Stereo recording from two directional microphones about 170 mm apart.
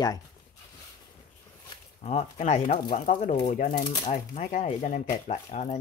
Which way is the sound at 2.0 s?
40° left (ahead or behind).